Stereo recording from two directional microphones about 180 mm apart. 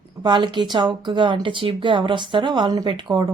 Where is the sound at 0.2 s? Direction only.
25° right (ahead or behind).